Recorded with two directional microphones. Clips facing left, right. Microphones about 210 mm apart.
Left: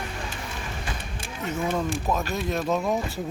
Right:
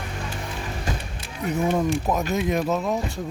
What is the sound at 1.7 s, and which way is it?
Speech, 15° right (ahead or behind).